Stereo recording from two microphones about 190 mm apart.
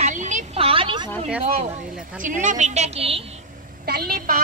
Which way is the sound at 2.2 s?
40° right (ahead or behind).